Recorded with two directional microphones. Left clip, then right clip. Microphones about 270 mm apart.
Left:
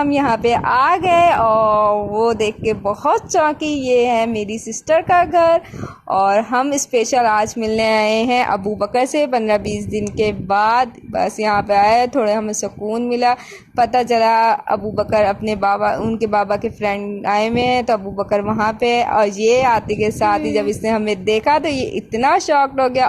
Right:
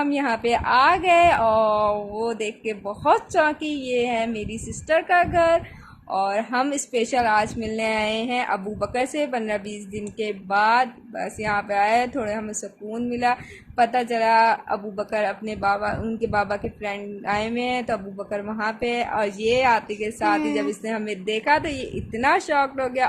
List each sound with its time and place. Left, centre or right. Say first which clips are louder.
0.0 s a woman's voice: left 7 dB; left